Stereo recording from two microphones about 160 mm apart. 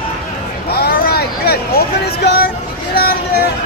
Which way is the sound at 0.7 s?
80° left.